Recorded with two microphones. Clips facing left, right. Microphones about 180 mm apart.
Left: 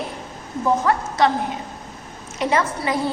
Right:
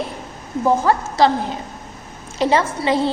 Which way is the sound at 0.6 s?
30° right (ahead or behind).